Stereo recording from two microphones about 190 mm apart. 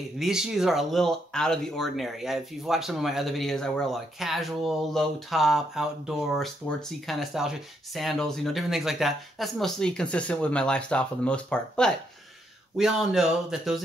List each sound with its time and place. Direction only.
0.2 s speech: centre (ahead or behind)